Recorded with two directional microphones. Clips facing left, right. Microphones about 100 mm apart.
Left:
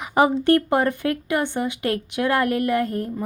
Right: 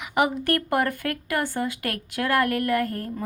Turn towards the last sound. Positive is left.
turn(degrees=20)  # may be behind; listen again after turning